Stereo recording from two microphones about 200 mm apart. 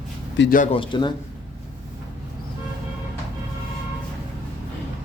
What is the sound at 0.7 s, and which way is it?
Speech, 25° left (ahead or behind).